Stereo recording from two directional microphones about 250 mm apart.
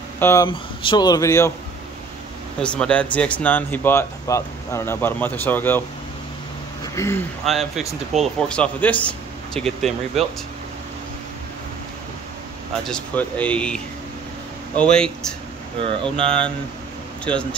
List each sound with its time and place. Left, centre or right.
0.2 s speech: centre
2.6 s speech: centre
6.8 s a sound: centre
7.4 s speech: centre
12.8 s speech: centre
15.8 s speech: right
17.2 s speech: centre